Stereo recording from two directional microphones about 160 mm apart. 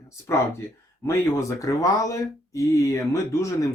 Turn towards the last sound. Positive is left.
turn(degrees=20)  # may be behind; listen again after turning